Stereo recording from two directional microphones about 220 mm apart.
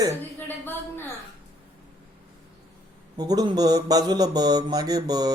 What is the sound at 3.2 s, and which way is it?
Speech, 15° right (ahead or behind).